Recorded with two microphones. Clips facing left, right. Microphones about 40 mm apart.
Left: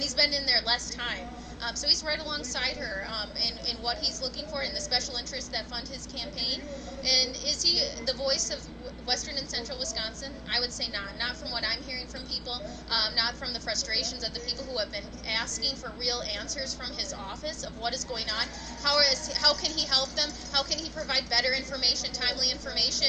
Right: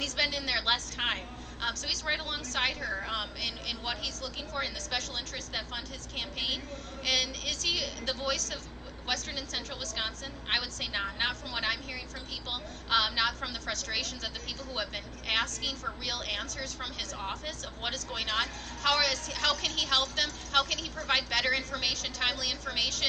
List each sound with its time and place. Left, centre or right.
0.0 s a woman's voice: right